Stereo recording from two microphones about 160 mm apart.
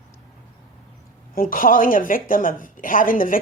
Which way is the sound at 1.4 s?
60° left (ahead or behind).